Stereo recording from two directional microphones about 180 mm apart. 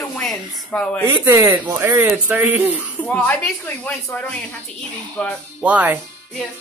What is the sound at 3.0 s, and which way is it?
Speech, 10° left (ahead or behind).